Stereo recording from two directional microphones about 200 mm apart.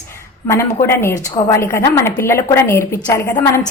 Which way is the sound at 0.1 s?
15° left (ahead or behind).